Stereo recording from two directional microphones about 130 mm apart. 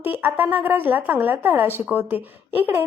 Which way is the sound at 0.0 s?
15° right (ahead or behind).